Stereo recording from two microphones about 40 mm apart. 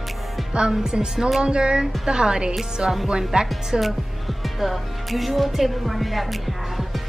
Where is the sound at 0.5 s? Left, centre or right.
Right.